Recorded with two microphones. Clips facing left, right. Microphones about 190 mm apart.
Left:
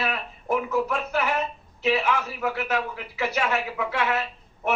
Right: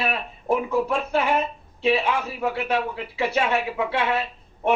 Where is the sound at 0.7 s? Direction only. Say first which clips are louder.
Right 3 dB; 30° right (ahead or behind).